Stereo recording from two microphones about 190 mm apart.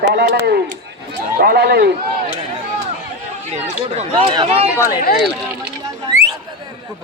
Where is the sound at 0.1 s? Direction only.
60° right (ahead or behind).